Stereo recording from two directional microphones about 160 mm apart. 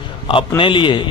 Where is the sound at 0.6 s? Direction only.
30° left (ahead or behind).